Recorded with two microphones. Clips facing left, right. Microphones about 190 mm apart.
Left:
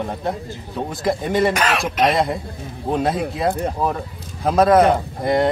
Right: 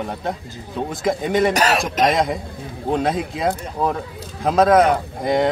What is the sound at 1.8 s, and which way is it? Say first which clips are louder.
Speech: even; 5° left (ahead or behind).